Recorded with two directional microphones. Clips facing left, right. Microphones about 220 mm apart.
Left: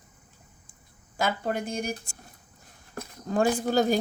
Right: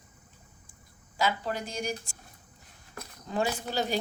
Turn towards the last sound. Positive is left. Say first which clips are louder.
# left 7 dB
turn(degrees=45)  # may be behind; listen again after turning